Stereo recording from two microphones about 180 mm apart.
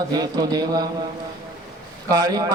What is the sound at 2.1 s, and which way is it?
Speech, 20° right (ahead or behind).